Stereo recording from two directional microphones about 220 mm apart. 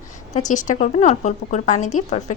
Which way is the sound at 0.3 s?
35° left (ahead or behind).